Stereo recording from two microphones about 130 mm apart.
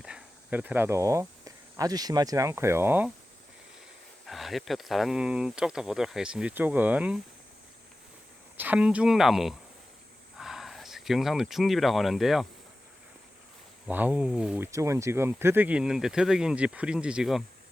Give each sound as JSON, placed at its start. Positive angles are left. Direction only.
{"t": 0.0, "sound": "speech", "side_deg": -10}
{"t": 4.3, "sound": "speech", "side_deg": 0}
{"t": 8.5, "sound": "speech", "side_deg": -10}
{"t": 13.8, "sound": "speech", "side_deg": -10}
{"t": 14.6, "sound": "speech", "side_deg": -20}